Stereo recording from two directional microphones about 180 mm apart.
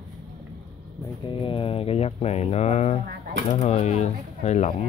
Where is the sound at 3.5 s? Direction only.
40° left (ahead or behind).